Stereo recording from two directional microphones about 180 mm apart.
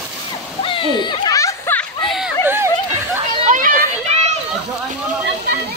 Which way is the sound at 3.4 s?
45° right (ahead or behind).